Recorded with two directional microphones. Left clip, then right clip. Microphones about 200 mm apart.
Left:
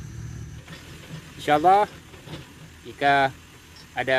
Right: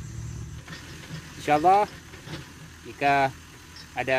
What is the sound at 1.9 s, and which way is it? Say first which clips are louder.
Vehicle: right 1 dB; 15° right (ahead or behind).